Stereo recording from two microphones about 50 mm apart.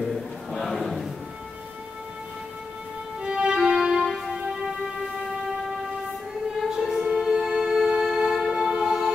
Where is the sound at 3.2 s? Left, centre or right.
Centre.